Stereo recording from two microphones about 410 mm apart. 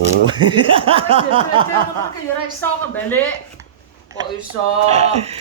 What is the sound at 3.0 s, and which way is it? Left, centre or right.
Speech, centre.